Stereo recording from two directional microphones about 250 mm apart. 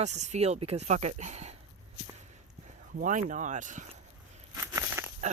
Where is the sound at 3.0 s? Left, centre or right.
Right.